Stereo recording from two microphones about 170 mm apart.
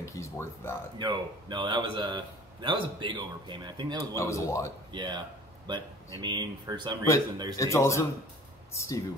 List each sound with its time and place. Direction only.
0.0 s speech: 15° left (ahead or behind)
0.9 s a man's voice: 25° right (ahead or behind)
4.0 s speech: 15° left (ahead or behind)
4.9 s a man's voice: 25° right (ahead or behind)
6.2 s a man's voice: 25° right (ahead or behind)
7.5 s speech: 20° left (ahead or behind)